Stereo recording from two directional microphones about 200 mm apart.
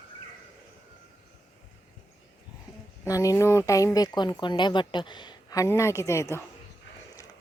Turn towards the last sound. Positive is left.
turn(degrees=15)  # may be behind; listen again after turning